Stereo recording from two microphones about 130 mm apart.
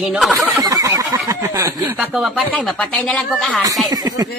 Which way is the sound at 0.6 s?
25° right (ahead or behind).